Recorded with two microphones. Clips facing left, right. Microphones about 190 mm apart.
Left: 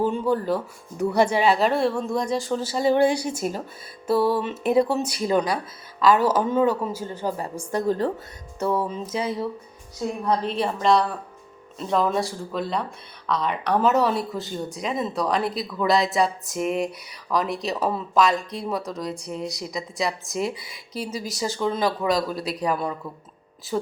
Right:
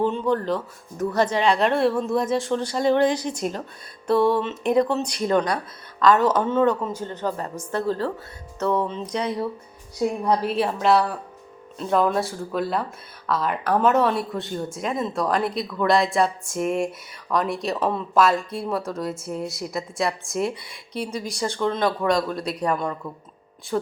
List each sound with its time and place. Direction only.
0.0 s a woman's voice: 10° left (ahead or behind)
10.0 s a woman's voice: 10° right (ahead or behind)